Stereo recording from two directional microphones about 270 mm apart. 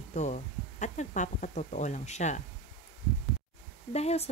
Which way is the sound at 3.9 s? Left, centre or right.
Left.